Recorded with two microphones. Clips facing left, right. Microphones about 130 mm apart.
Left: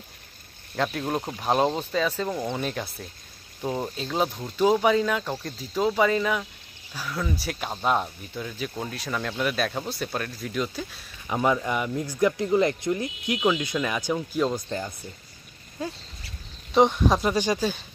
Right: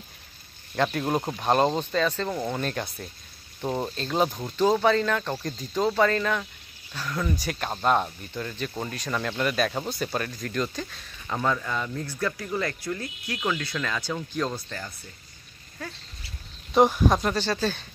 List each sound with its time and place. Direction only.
0.7 s speech: centre (ahead or behind)
15.8 s speech: 15° left (ahead or behind)
16.7 s speech: centre (ahead or behind)